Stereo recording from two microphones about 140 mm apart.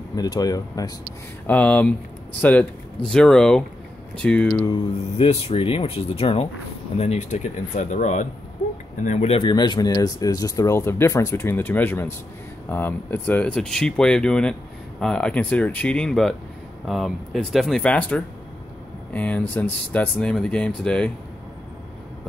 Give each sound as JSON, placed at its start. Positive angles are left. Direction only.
{"t": 0.1, "sound": "speech", "side_deg": 25}
{"t": 1.5, "sound": "speech", "side_deg": 10}
{"t": 5.1, "sound": "speech", "side_deg": 45}
{"t": 9.4, "sound": "speech", "side_deg": 30}